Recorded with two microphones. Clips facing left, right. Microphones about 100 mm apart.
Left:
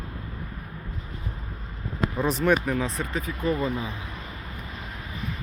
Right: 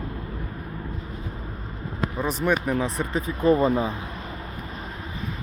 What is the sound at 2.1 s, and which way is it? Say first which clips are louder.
Speech: left 2 dB; centre (ahead or behind).